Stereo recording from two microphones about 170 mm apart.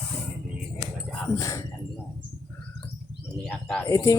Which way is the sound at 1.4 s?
15° left (ahead or behind).